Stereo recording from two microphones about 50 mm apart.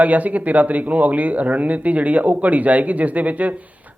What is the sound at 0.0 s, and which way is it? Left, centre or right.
Speech, right.